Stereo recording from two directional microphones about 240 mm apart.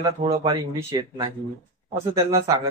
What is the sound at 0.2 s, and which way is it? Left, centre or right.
Speech, right.